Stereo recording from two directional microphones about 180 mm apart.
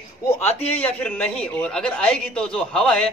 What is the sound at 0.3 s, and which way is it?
A man's voice, 10° left (ahead or behind).